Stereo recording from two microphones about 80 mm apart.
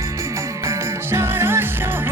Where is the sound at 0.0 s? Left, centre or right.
Right.